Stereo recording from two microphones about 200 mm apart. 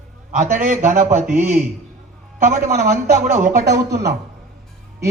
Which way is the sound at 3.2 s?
40° right (ahead or behind).